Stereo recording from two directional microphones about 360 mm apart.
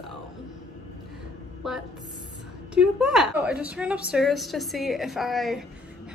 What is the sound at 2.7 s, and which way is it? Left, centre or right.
A woman's voice, centre.